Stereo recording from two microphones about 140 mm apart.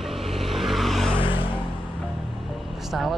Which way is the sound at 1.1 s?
35° left (ahead or behind).